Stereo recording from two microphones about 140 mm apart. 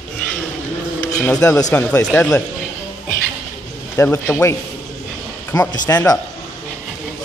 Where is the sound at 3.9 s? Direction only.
15° left (ahead or behind).